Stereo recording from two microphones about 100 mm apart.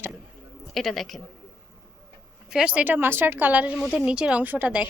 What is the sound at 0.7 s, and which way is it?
Speech, centre (ahead or behind).